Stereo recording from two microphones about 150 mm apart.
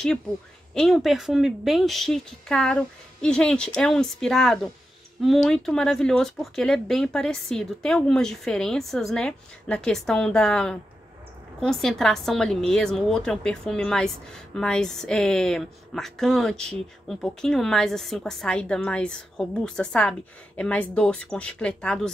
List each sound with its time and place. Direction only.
0.7 s speech: centre (ahead or behind)